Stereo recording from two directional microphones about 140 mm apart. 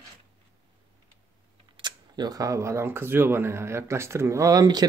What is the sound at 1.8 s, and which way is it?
Speech, 30° right (ahead or behind).